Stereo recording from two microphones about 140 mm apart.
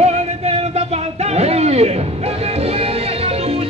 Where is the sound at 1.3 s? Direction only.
50° right (ahead or behind).